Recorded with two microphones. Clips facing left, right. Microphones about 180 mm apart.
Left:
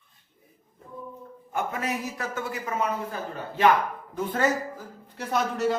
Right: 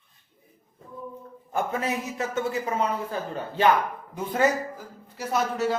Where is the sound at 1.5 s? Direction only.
30° right (ahead or behind).